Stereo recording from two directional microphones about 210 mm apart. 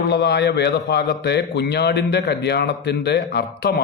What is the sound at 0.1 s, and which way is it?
Speech, 50° left (ahead or behind).